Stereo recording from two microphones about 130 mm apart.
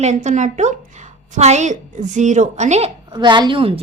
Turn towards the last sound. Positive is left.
turn(degrees=-40)  # may be behind; listen again after turning